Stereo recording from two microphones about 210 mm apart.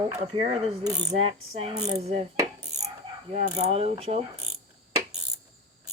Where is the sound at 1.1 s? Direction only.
25° right (ahead or behind).